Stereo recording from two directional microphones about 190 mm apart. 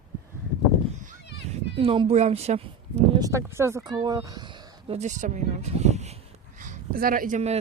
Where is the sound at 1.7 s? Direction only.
30° right (ahead or behind).